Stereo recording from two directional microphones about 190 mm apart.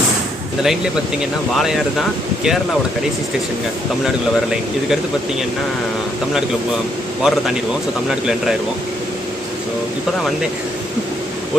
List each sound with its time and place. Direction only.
1.2 s speech: centre (ahead or behind)
7.2 s speech: centre (ahead or behind)